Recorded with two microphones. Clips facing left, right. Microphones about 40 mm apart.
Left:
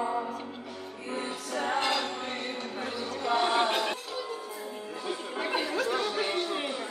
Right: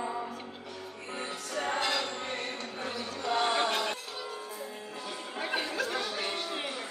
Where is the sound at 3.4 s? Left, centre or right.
Centre.